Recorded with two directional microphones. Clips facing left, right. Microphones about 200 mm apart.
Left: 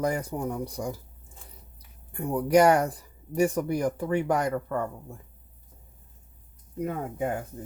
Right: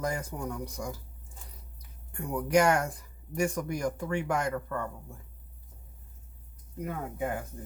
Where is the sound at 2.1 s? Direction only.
35° left (ahead or behind).